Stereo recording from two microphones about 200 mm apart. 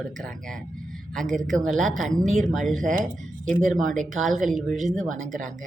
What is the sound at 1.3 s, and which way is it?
Speech, 40° right (ahead or behind).